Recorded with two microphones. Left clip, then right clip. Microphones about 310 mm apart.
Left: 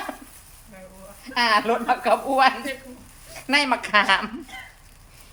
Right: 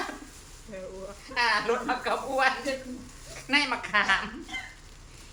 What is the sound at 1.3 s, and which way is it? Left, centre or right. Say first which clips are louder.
A woman's voice: left 6 dB; left.